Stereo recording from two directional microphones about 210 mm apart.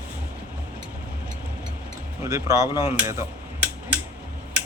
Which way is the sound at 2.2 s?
15° right (ahead or behind).